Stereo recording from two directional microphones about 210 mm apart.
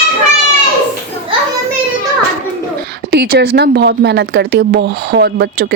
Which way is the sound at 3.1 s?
50° right (ahead or behind).